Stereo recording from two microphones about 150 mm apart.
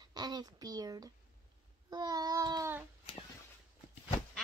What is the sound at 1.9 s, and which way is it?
Child singing, 25° right (ahead or behind).